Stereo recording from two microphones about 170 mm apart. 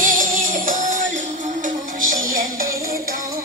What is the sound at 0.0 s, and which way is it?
Music, 50° right (ahead or behind).